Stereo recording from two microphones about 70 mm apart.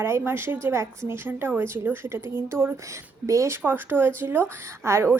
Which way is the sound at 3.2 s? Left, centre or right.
Right.